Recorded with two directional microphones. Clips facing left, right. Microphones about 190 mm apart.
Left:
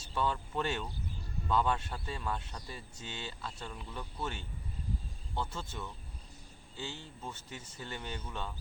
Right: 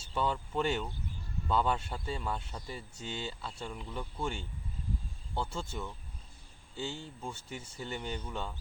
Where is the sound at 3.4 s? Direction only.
10° right (ahead or behind).